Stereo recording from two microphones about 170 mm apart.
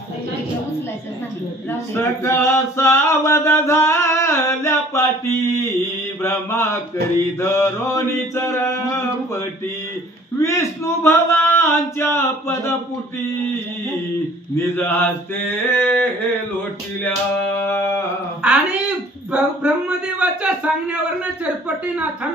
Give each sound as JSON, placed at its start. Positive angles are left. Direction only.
{"t": 1.7, "sound": "male singing", "side_deg": 15}
{"t": 6.2, "sound": "mantra", "side_deg": 15}
{"t": 10.4, "sound": "mantra", "side_deg": 15}
{"t": 14.5, "sound": "mantra", "side_deg": 15}
{"t": 17.6, "sound": "a sound", "side_deg": 15}
{"t": 18.4, "sound": "a sound", "side_deg": -5}